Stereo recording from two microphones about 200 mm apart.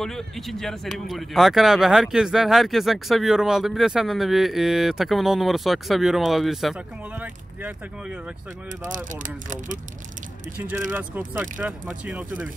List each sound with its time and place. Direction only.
0.0 s speech: centre (ahead or behind)
9.1 s speech: 40° right (ahead or behind)
10.6 s speech: 10° right (ahead or behind)